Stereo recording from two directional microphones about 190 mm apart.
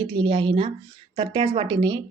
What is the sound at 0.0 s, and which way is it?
Speech, 25° right (ahead or behind).